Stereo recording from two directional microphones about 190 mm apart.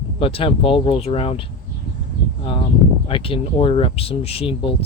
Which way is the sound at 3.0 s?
30° left (ahead or behind).